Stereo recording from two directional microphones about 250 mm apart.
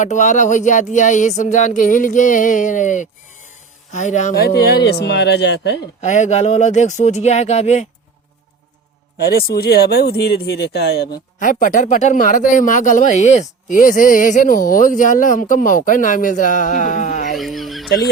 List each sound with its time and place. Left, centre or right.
0.0 s speech: left
6.0 s speech: left
9.2 s speech: left
17.3 s fowl: centre